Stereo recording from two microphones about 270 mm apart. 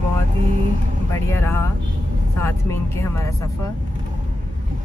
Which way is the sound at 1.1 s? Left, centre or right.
Centre.